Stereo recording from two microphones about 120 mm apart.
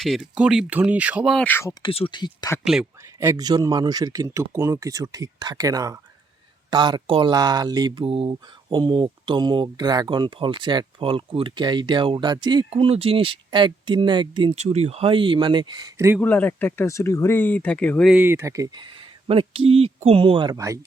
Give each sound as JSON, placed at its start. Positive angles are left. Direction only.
{"t": 0.0, "sound": "speech", "side_deg": 0}
{"t": 0.3, "sound": "speech", "side_deg": -10}
{"t": 1.4, "sound": "speech", "side_deg": 15}
{"t": 1.8, "sound": "speech", "side_deg": 50}
{"t": 3.2, "sound": "speech", "side_deg": -30}
{"t": 12.7, "sound": "speech", "side_deg": -55}
{"t": 14.5, "sound": "speech", "side_deg": -60}
{"t": 16.2, "sound": "speech", "side_deg": 15}
{"t": 18.2, "sound": "speech", "side_deg": -20}